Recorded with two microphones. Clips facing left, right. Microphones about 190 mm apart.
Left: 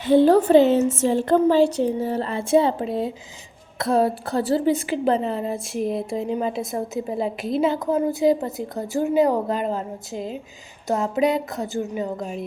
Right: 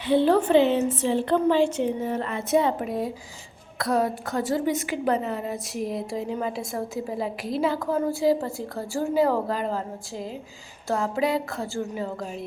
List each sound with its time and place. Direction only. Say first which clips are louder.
0.1 s a woman's voice: left 5 dB; 40° left (ahead or behind); by 12.1 s 20° left (ahead or behind)